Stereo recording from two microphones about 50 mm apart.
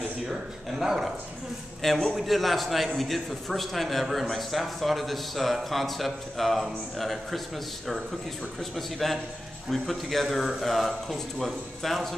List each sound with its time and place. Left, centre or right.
0.3 s speech: centre
1.8 s a man's voice: centre